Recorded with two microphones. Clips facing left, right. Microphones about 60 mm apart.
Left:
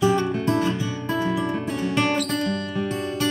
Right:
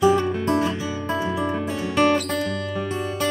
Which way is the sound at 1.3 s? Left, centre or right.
Centre.